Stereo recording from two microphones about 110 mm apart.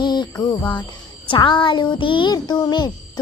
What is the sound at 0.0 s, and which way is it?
Speech, 40° left (ahead or behind).